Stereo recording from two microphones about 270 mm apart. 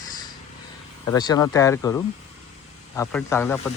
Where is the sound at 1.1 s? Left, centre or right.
Centre.